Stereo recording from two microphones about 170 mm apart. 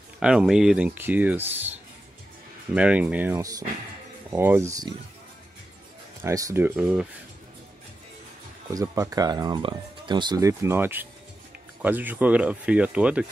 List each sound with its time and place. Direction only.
0.2 s speech: 5° right (ahead or behind)
2.7 s speech: 5° right (ahead or behind)
6.2 s speech: 20° right (ahead or behind)
8.7 s speech: 20° right (ahead or behind)